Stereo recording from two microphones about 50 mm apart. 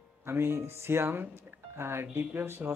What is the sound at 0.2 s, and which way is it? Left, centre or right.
Speech, right.